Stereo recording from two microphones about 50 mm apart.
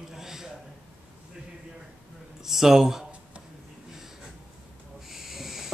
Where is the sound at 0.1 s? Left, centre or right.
Centre.